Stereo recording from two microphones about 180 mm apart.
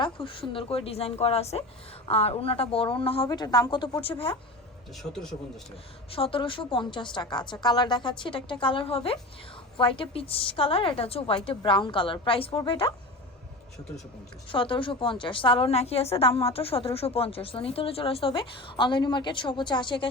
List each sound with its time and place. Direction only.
0.0 s a woman's voice: 30° left (ahead or behind)
5.1 s speech: 5° left (ahead or behind)
6.1 s a woman's voice: 30° left (ahead or behind)
14.5 s a woman's voice: 30° left (ahead or behind)